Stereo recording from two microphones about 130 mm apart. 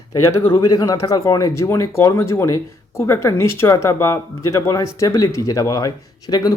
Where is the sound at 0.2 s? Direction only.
20° left (ahead or behind).